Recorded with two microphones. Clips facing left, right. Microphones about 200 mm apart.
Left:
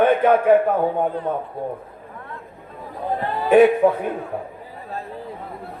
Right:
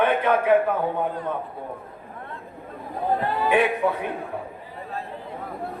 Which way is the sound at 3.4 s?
45° left (ahead or behind).